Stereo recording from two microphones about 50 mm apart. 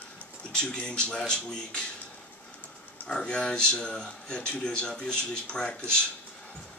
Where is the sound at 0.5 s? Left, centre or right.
Centre.